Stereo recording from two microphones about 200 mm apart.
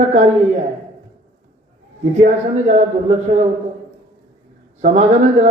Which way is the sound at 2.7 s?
35° right (ahead or behind).